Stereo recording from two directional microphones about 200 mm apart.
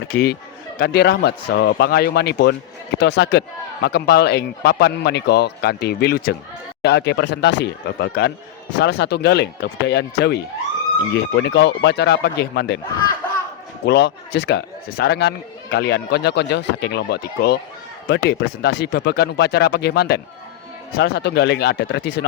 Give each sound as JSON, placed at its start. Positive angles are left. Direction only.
{"t": 0.1, "sound": "speech", "side_deg": 50}
{"t": 13.8, "sound": "speech", "side_deg": 60}